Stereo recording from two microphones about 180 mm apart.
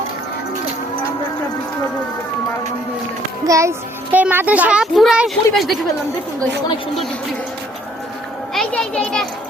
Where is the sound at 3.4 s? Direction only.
15° right (ahead or behind); by 5.7 s centre (ahead or behind).